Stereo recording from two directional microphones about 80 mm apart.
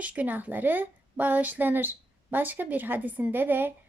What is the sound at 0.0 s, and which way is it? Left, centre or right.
A woman's voice, centre.